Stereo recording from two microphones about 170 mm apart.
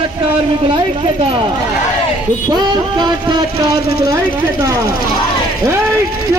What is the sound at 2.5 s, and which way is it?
Music, 25° right (ahead or behind).